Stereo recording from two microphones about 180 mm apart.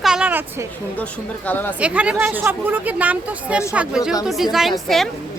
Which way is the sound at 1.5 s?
10° left (ahead or behind).